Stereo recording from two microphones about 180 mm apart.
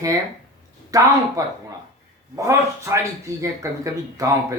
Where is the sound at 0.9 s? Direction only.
20° right (ahead or behind).